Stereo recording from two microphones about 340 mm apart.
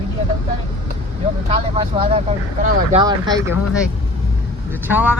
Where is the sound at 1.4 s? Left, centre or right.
Centre.